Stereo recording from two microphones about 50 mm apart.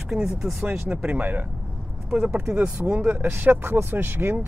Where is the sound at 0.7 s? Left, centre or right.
Right.